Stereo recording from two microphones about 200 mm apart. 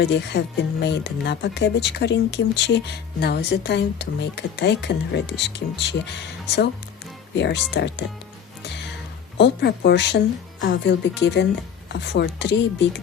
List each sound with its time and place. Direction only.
0.0 s speech: 60° left (ahead or behind)
7.3 s speech: 60° left (ahead or behind)
9.4 s speech: 60° left (ahead or behind)